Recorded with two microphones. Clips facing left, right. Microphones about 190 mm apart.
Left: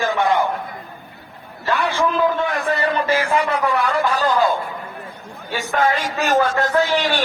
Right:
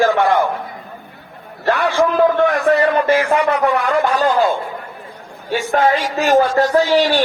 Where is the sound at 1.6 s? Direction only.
65° right (ahead or behind).